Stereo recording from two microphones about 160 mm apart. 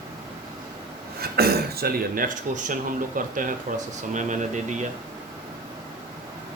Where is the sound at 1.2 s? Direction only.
80° right; by 4.7 s 50° right (ahead or behind).